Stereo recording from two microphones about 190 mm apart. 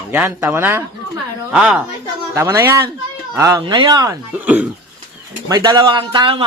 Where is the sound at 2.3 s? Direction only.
15° right (ahead or behind).